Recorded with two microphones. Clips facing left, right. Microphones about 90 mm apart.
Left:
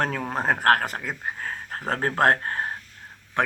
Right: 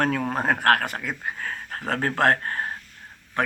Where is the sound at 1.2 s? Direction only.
15° left (ahead or behind).